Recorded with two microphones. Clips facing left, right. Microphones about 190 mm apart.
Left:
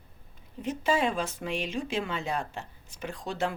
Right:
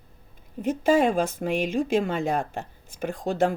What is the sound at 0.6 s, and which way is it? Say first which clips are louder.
Speech: right 7 dB; 50° right (ahead or behind).